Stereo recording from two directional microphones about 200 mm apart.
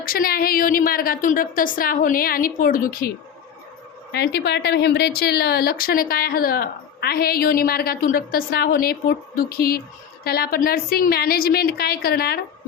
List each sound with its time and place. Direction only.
0.0 s a woman's voice: 45° left (ahead or behind)
4.1 s a woman's voice: 55° left (ahead or behind)